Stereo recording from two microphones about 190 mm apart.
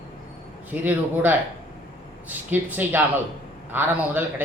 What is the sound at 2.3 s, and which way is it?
A man's voice, 10° right (ahead or behind).